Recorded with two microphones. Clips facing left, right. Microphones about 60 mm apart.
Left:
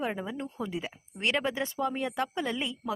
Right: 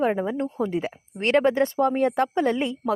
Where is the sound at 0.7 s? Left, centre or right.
Right.